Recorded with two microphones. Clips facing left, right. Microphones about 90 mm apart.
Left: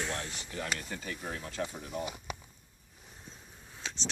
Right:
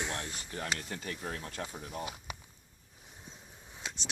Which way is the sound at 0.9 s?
55° right (ahead or behind).